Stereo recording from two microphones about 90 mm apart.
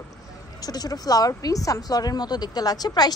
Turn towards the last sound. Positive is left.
turn(degrees=45)  # may be behind; listen again after turning